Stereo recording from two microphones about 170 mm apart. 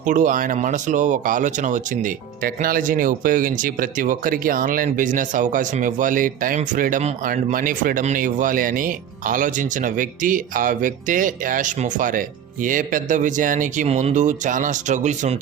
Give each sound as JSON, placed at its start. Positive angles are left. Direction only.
{"t": 0.0, "sound": "speech", "side_deg": -50}